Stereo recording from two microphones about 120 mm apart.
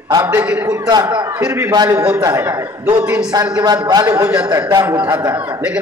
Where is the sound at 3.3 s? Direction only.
35° right (ahead or behind).